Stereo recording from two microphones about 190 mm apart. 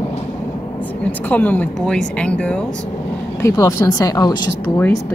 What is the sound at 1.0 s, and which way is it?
A woman's voice, 10° left (ahead or behind).